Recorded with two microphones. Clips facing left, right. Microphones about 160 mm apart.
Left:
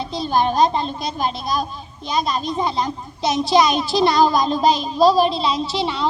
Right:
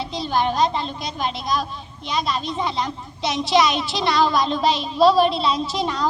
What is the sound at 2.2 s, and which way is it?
A woman's voice, 45° left (ahead or behind).